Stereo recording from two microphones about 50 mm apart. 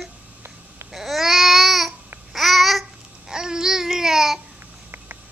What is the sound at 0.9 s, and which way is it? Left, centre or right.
Babbling, centre.